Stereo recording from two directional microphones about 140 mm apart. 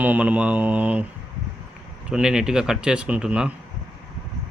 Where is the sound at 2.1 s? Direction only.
5° right (ahead or behind).